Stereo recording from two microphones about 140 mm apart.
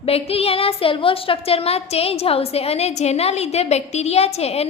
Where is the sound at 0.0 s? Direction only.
45° left (ahead or behind).